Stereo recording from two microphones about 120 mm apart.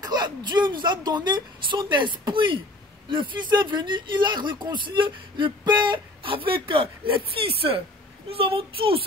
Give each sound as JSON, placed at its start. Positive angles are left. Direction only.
{"t": 0.0, "sound": "a woman's voice", "side_deg": -35}